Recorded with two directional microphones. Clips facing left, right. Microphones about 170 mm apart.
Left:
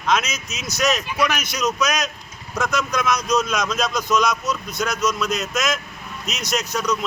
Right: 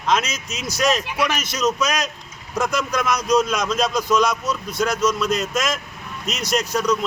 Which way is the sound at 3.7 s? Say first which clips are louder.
Right 2 dB; 30° right (ahead or behind).